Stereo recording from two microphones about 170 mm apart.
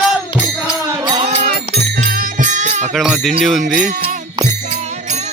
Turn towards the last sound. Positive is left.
turn(degrees=-50)  # may be behind; listen again after turning